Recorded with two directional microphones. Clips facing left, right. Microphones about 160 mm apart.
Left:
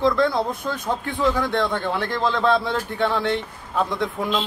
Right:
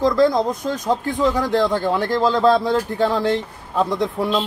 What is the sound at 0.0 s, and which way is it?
Speech, 40° right (ahead or behind).